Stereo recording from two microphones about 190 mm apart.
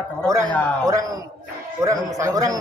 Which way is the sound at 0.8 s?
15° right (ahead or behind).